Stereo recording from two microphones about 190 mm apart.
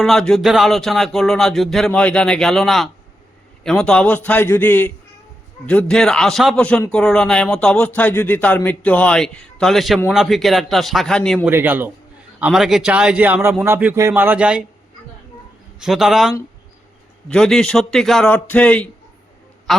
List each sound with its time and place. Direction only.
0.0 s a man's voice: centre (ahead or behind)
11.4 s a man's voice: 10° right (ahead or behind)
15.8 s speech: centre (ahead or behind)